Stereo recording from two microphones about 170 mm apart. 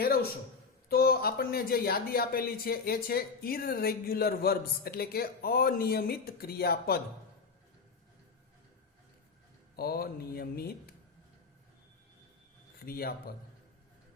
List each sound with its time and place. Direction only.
0.0 s a sound: 60° left (ahead or behind)
0.9 s speech: 65° left (ahead or behind)
9.7 s speech: 65° left (ahead or behind)
12.8 s speech: 65° left (ahead or behind)